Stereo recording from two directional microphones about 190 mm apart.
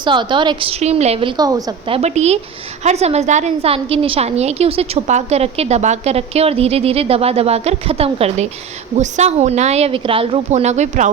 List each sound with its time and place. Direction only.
0.0 s a woman's voice: 25° right (ahead or behind)
2.0 s a woman's voice: 35° right (ahead or behind)